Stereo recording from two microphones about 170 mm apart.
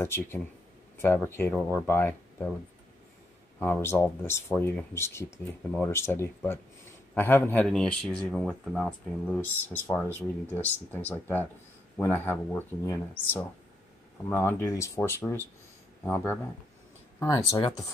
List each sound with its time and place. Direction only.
0.0 s speech: 15° left (ahead or behind)
3.5 s speech: 10° left (ahead or behind)